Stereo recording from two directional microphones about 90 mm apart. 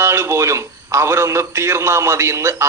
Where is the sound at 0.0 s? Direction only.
30° right (ahead or behind).